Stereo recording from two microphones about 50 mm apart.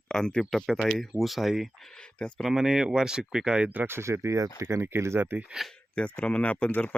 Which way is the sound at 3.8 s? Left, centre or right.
Right.